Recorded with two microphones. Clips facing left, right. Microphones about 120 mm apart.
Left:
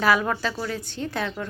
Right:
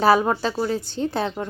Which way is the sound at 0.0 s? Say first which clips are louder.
Right 4 dB; 30° right (ahead or behind).